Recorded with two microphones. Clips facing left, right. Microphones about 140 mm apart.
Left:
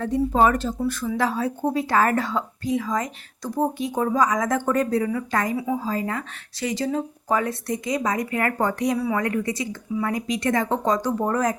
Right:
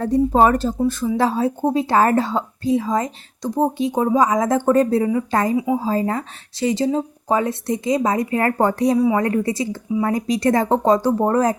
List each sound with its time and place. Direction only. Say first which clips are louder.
0.0 s speech: right 4 dB; 35° right (ahead or behind)